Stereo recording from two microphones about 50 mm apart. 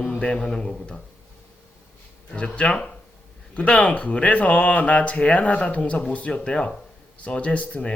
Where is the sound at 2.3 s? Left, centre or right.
Left.